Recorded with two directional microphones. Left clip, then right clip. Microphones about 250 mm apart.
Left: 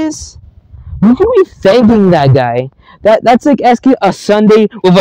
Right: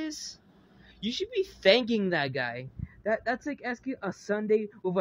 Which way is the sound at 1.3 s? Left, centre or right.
Left.